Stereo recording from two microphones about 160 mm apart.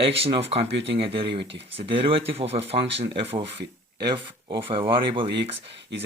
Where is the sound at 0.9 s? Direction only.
35° right (ahead or behind).